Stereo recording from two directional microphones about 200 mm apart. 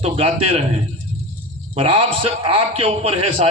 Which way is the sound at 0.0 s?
30° right (ahead or behind).